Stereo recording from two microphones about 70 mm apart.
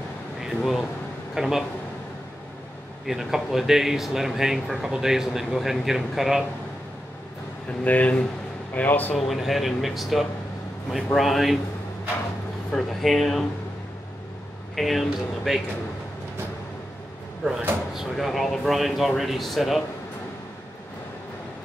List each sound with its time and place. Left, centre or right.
0.4 s air conditioning: centre
1.3 s a man's voice: centre
3.1 s speech: centre
7.8 s a man's voice: left
9.1 s speech: centre
12.7 s speech: centre
14.8 s speech: centre
17.4 s speech: centre